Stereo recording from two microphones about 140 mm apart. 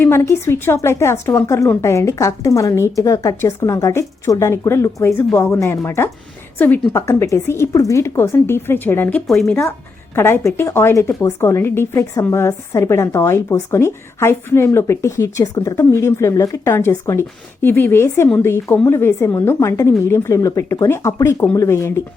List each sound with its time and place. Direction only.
0.0 s a woman's voice: 20° left (ahead or behind)
9.2 s speech: centre (ahead or behind)
10.2 s a woman's voice: 15° left (ahead or behind)